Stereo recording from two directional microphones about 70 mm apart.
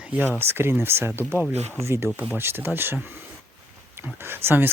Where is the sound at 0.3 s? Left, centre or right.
Right.